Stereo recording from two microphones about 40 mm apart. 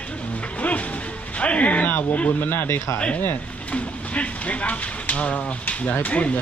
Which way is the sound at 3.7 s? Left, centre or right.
Left.